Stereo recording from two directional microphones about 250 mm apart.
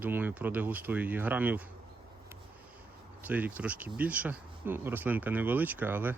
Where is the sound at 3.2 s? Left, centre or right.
Centre.